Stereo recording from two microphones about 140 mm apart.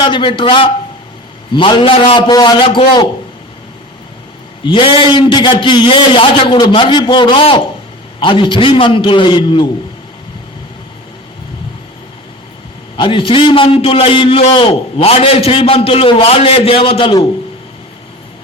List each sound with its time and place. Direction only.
0.0 s a man's voice: 35° left (ahead or behind)
4.6 s a man's voice: 35° left (ahead or behind)
13.0 s a man's voice: 35° left (ahead or behind)